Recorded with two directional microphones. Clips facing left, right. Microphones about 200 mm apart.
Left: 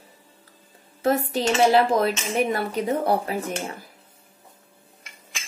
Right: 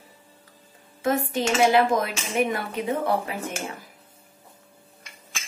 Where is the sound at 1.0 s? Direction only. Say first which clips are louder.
Left 2 dB; 35° left (ahead or behind).